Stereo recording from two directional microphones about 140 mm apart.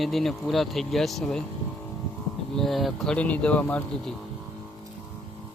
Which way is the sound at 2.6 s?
Centre (ahead or behind).